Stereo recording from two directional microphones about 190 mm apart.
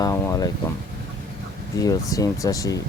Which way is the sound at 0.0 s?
20° left (ahead or behind).